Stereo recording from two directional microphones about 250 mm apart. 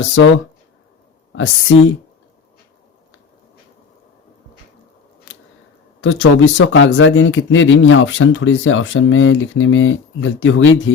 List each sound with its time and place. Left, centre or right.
0.0 s speech: left
5.3 s scissors: left
6.0 s speech: left